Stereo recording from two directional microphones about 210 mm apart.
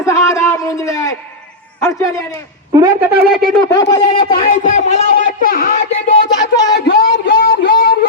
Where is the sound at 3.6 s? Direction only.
15° left (ahead or behind).